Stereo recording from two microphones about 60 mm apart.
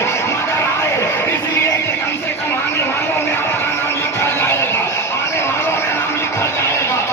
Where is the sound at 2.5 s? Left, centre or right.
Left.